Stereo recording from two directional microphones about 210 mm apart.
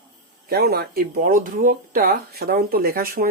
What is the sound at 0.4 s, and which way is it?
Speech, 50° right (ahead or behind).